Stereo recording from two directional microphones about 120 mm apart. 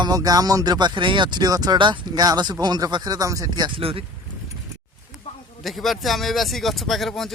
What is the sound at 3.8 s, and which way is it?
Speech, 50° right (ahead or behind).